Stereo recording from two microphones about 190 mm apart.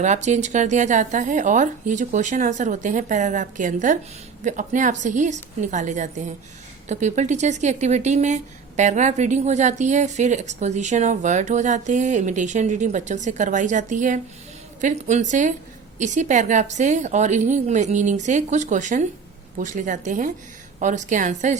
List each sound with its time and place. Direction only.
0.0 s speech: 40° right (ahead or behind)